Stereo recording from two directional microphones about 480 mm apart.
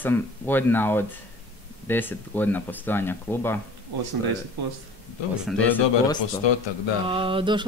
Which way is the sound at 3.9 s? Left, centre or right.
Right.